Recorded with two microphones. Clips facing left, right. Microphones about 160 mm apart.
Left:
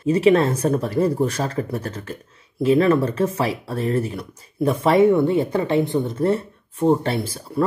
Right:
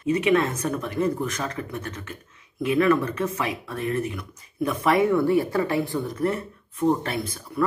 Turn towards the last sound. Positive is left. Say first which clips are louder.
# left 5 dB
turn(degrees=30)  # may be behind; listen again after turning